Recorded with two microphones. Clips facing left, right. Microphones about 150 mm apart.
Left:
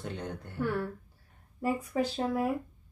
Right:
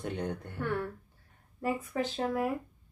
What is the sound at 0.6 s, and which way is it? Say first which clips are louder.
Speech: left 2 dB; 5° left (ahead or behind).